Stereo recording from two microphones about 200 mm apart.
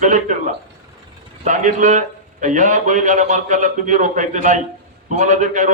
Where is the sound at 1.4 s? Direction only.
40° right (ahead or behind).